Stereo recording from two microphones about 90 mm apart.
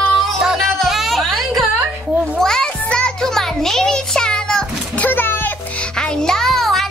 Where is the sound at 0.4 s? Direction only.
5° right (ahead or behind); by 5.5 s 20° left (ahead or behind).